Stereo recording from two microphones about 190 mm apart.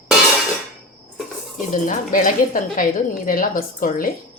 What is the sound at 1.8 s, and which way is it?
A woman's voice, 45° left (ahead or behind).